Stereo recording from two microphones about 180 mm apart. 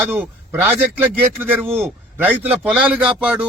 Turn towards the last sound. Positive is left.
turn(degrees=-5)  # may be behind; listen again after turning